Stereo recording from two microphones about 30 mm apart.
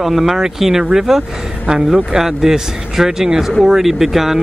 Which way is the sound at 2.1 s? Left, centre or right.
Centre.